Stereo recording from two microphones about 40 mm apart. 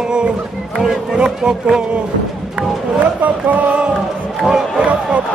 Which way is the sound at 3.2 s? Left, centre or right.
Right.